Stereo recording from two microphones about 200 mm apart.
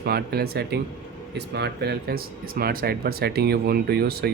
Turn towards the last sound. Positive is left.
turn(degrees=-50)  # may be behind; listen again after turning